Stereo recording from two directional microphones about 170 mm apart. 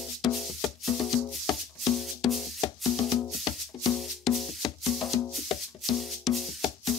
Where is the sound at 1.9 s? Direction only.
Centre (ahead or behind).